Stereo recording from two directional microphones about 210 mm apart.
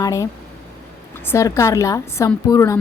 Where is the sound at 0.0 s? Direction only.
15° left (ahead or behind).